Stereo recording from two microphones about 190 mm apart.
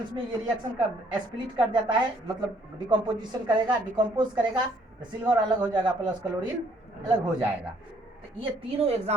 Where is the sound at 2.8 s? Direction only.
25° right (ahead or behind).